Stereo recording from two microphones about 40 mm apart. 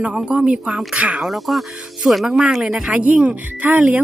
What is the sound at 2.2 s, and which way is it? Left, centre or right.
Speech, centre.